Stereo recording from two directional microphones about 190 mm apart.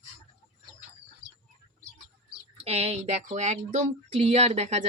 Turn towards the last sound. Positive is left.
turn(degrees=-35)  # may be behind; listen again after turning